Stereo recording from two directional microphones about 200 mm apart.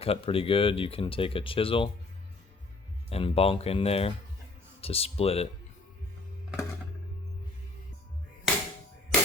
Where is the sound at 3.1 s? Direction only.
30° left (ahead or behind).